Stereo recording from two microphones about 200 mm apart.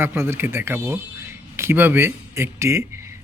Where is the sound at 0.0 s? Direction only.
10° right (ahead or behind).